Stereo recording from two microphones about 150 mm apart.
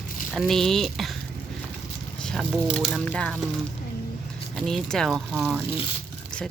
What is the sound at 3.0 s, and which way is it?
Speech, 5° left (ahead or behind).